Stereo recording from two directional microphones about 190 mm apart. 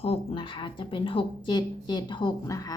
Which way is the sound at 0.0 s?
30° left (ahead or behind).